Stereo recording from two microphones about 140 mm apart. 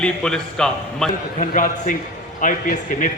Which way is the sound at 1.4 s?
70° left (ahead or behind).